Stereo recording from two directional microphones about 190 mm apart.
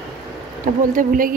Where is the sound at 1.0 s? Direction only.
45° right (ahead or behind).